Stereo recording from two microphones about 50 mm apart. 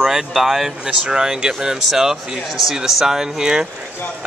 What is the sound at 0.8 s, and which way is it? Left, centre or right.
Speech, right.